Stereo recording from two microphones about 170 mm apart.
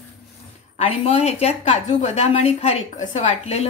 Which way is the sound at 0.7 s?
40° left (ahead or behind).